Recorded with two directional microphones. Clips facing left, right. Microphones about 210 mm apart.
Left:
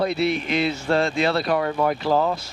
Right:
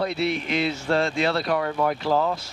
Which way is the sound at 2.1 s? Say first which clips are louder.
Left 2 dB; 35° left (ahead or behind).